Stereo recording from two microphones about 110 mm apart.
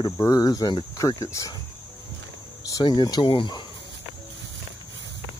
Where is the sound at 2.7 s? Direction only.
35° left (ahead or behind).